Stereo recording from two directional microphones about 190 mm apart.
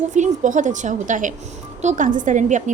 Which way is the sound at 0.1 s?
40° right (ahead or behind).